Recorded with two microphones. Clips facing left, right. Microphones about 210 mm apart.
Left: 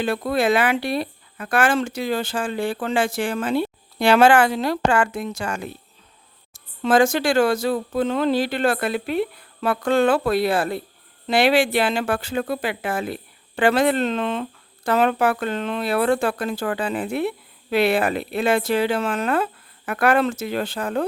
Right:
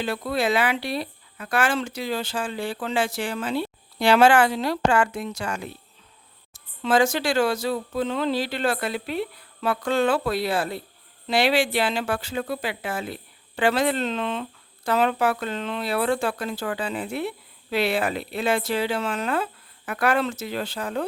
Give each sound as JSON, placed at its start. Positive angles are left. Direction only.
{"t": 0.0, "sound": "speech", "side_deg": 50}